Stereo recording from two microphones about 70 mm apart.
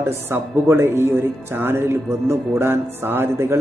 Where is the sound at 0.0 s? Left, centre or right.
Right.